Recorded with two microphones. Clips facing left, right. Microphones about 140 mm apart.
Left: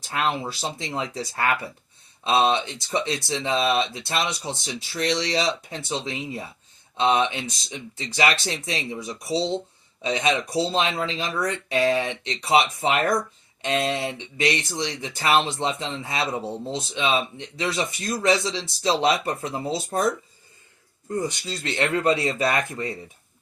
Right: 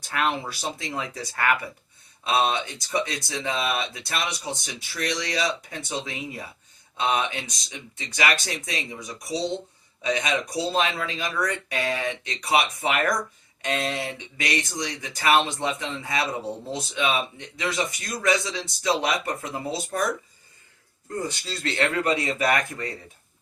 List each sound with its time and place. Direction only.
0.1 s speech: 25° left (ahead or behind)
21.1 s speech: 20° left (ahead or behind)